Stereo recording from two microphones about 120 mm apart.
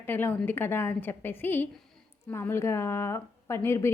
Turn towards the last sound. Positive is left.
turn(degrees=20)  # may be behind; listen again after turning